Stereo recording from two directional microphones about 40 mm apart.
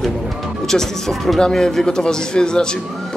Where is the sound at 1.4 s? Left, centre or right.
Centre.